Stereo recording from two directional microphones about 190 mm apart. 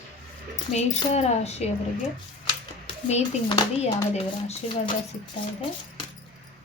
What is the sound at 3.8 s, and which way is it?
A woman's voice, 35° left (ahead or behind).